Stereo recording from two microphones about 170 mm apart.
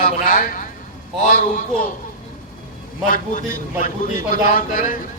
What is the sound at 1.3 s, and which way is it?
Speech, 45° left (ahead or behind).